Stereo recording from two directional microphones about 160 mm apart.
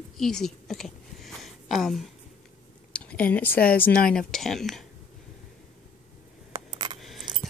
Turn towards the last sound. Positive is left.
turn(degrees=0)  # may be behind; listen again after turning